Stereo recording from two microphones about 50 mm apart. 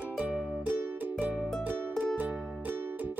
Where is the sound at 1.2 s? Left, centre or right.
Right.